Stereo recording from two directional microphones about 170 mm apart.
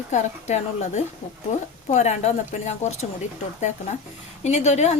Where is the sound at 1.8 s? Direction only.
40° left (ahead or behind).